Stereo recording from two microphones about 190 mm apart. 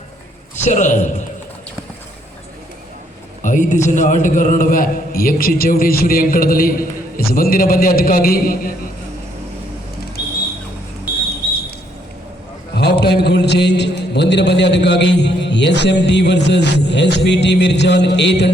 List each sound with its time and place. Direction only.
0.6 s a man's voice: 40° left (ahead or behind)
3.4 s a man's voice: 40° left (ahead or behind)
12.7 s a man's voice: 60° left (ahead or behind)